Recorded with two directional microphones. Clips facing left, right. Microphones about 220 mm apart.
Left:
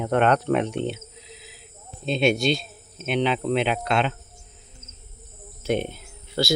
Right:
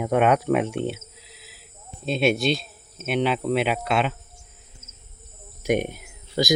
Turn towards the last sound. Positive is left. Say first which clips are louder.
# right 1 dB
turn(degrees=-15)  # may be behind; listen again after turning